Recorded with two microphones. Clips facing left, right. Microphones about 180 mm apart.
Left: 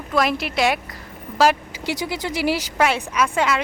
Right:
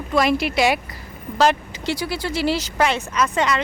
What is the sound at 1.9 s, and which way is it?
Speech, 15° left (ahead or behind).